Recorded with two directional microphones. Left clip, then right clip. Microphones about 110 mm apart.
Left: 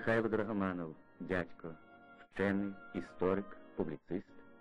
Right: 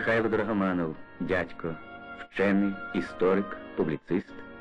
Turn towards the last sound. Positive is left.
turn(degrees=40)  # may be behind; listen again after turning